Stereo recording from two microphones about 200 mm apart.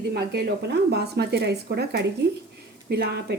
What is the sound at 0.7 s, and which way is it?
A woman's voice, 55° right (ahead or behind).